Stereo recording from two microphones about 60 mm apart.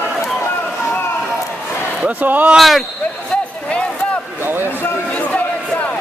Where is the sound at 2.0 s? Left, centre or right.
Right.